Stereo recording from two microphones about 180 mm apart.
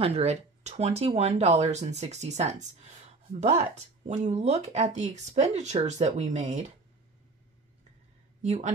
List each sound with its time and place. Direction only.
0.0 s speech: 35° right (ahead or behind)
8.4 s speech: 45° right (ahead or behind)